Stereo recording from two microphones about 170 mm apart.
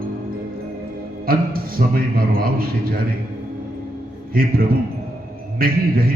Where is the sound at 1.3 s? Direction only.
60° right (ahead or behind).